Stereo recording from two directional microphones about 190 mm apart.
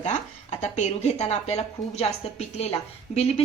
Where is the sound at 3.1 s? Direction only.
35° left (ahead or behind).